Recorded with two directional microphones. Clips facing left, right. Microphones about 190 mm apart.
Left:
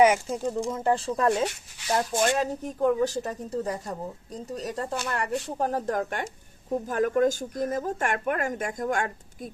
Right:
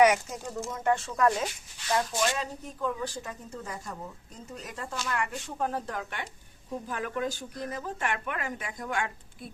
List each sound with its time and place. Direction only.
0.0 s speech: 30° left (ahead or behind)
1.9 s speech: 50° left (ahead or behind)